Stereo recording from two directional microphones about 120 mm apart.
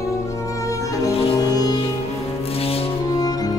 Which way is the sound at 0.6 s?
25° left (ahead or behind).